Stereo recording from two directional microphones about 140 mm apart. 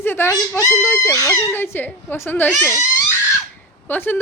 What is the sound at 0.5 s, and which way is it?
A child's voice, 20° left (ahead or behind).